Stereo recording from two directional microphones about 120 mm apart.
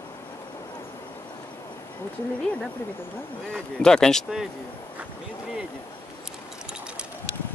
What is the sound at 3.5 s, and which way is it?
Speech, 5° left (ahead or behind).